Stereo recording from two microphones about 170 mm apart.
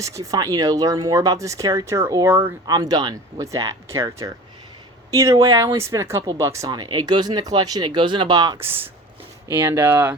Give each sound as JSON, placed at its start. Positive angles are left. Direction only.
{"t": 0.0, "sound": "speech", "side_deg": -20}